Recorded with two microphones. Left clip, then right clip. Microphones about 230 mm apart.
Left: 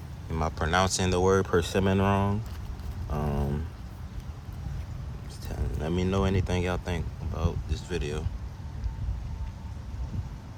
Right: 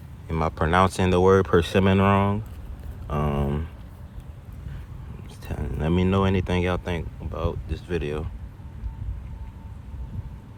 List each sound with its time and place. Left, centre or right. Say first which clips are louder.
0.3 s speech: right 5 dB; right
3.1 s a sound: right 6 dB; right
5.5 s speech: right 5 dB; right